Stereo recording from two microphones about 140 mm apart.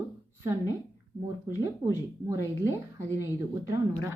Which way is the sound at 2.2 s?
20° right (ahead or behind).